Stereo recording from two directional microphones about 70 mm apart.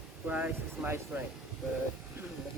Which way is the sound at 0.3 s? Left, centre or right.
Right.